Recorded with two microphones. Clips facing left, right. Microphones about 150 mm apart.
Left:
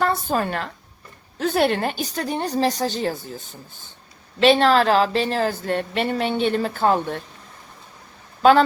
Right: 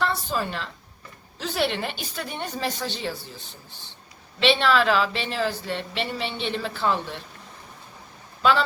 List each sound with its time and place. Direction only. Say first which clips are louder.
0.0 s a woman's voice: left 5 dB; 50° left (ahead or behind)
8.4 s speech: left 7 dB; 50° left (ahead or behind)